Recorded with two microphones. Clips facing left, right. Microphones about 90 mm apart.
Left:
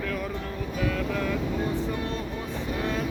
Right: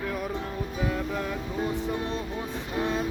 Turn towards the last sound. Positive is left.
turn(degrees=-20)  # may be behind; listen again after turning